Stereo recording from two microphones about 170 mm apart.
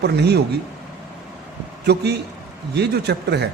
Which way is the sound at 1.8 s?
80° right.